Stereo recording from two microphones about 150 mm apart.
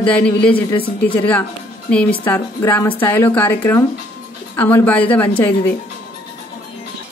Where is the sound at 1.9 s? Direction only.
10° left (ahead or behind).